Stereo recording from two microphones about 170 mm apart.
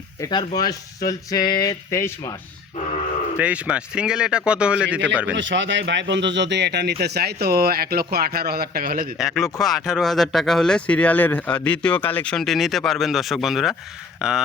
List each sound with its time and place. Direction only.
0.2 s speech: 25° left (ahead or behind)
3.3 s a man's voice: 5° right (ahead or behind)
5.3 s speech: 90° right; by 9.0 s 55° right (ahead or behind)
9.1 s speech: centre (ahead or behind)